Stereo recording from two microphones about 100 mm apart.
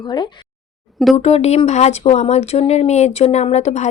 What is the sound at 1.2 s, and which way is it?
Speech, 90° left.